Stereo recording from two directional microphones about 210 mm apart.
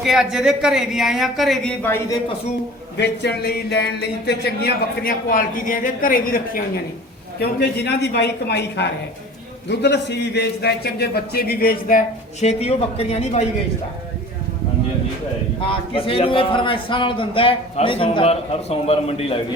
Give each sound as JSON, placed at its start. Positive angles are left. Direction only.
{"t": 0.0, "sound": "speech", "side_deg": 0}
{"t": 3.0, "sound": "speech", "side_deg": 55}
{"t": 15.7, "sound": "a man's voice", "side_deg": 25}